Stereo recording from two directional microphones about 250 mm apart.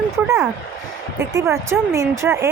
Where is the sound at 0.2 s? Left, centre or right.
Centre.